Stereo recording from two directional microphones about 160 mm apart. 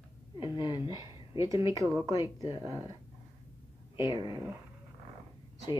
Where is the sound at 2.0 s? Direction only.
25° left (ahead or behind).